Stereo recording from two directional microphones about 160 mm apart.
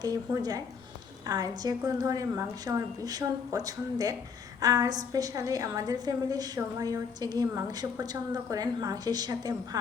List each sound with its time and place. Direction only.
0.0 s a woman's voice: 25° right (ahead or behind)